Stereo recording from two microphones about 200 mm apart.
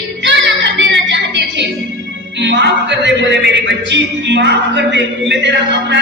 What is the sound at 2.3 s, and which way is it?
A man's voice, 60° right (ahead or behind).